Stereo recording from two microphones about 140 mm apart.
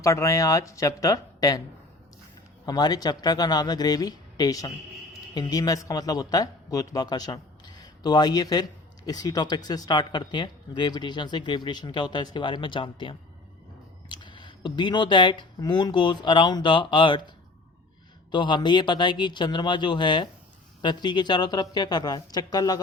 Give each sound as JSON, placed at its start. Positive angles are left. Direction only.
{"t": 0.0, "sound": "speech", "side_deg": 20}
{"t": 2.6, "sound": "a man's voice", "side_deg": 30}
{"t": 18.3, "sound": "speech", "side_deg": 35}